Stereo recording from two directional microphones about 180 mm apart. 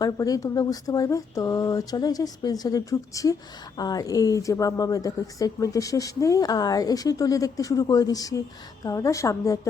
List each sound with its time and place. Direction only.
0.0 s speech: 20° left (ahead or behind)